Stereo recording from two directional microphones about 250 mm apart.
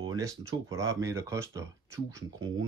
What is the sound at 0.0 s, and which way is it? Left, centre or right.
Speech, centre.